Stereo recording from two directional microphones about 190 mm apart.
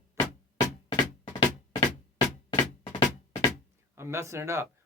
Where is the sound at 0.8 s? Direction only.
25° left (ahead or behind).